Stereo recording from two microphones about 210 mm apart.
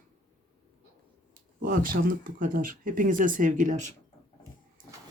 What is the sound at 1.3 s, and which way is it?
Speech, 40° right (ahead or behind).